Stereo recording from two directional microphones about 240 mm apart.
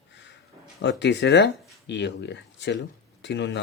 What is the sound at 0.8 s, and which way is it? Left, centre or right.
Speech, left.